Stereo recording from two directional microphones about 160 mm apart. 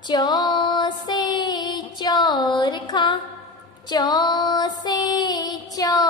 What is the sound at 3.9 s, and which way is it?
Female singing, 25° left (ahead or behind).